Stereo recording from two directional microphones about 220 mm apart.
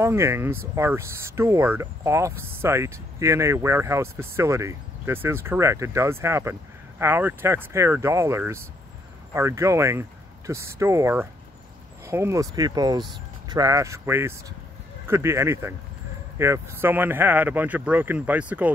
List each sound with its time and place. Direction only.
0.0 s speech: 10° right (ahead or behind)